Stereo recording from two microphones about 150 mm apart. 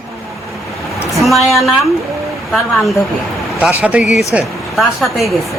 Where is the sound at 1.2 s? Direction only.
Centre (ahead or behind).